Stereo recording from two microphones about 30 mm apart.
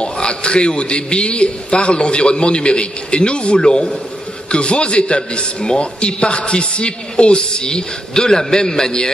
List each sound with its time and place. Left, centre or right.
0.0 s a man's voice: left